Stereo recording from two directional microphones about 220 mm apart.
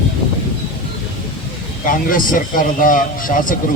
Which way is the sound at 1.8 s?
40° left (ahead or behind).